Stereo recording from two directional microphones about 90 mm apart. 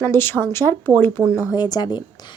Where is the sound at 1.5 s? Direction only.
50° left (ahead or behind).